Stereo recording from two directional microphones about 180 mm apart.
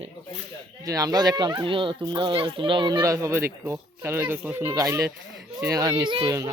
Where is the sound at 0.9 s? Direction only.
20° right (ahead or behind).